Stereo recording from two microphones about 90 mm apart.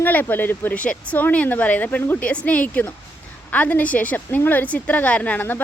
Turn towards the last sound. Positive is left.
turn(degrees=20)  # may be behind; listen again after turning